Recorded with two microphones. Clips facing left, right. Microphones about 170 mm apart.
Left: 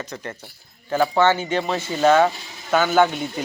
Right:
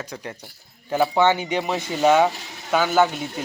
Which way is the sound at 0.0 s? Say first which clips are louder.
Left 1 dB; 10° right (ahead or behind).